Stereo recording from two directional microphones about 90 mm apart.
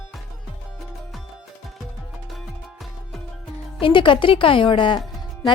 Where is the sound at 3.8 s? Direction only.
70° left (ahead or behind).